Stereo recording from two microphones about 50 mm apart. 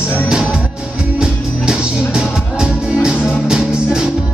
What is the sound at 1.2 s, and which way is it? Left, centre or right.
Music, centre.